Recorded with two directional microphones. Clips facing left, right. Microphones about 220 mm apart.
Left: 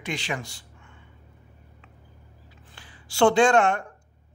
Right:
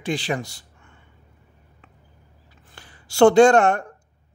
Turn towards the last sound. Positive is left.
turn(degrees=-40)  # may be behind; listen again after turning